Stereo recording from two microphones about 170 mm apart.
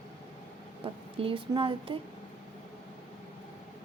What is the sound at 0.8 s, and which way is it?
Speech, 30° right (ahead or behind).